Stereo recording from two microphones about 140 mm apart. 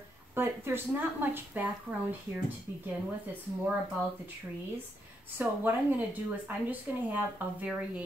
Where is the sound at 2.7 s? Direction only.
15° right (ahead or behind).